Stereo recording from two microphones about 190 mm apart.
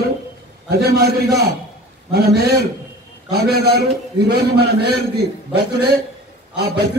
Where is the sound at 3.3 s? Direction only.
55° right (ahead or behind).